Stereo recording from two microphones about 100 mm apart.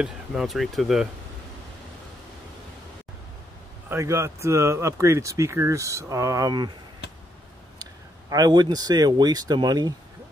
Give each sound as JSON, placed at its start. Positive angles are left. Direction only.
{"t": 0.0, "sound": "speech", "side_deg": -5}
{"t": 3.9, "sound": "speech", "side_deg": -25}
{"t": 7.8, "sound": "speech", "side_deg": -40}